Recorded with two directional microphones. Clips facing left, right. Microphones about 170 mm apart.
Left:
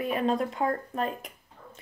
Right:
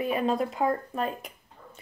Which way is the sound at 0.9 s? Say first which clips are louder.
Even; centre (ahead or behind).